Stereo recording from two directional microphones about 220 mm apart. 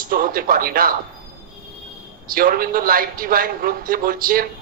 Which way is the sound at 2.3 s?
40° right (ahead or behind).